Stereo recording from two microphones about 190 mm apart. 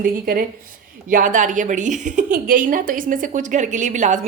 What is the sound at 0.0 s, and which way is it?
A woman's voice, 50° right (ahead or behind).